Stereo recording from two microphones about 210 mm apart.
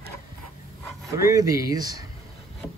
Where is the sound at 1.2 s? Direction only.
15° right (ahead or behind).